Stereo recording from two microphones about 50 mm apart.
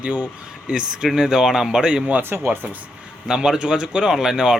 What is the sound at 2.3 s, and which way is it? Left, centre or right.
Speech, right.